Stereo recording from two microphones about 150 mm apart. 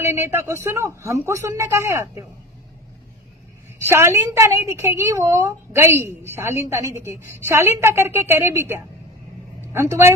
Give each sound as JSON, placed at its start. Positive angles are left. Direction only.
{"t": 0.0, "sound": "a woman's voice", "side_deg": -15}
{"t": 3.8, "sound": "a woman's voice", "side_deg": -15}